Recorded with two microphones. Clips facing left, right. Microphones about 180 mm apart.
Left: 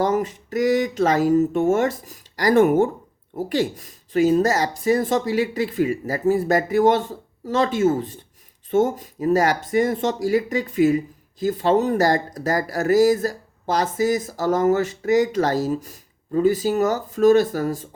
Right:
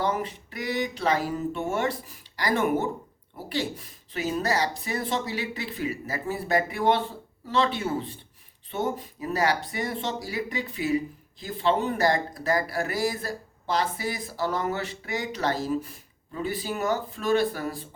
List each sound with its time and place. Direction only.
0.0 s speech: 45° left (ahead or behind)